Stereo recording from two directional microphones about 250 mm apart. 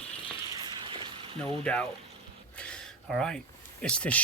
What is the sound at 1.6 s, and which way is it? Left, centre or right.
Speech, centre.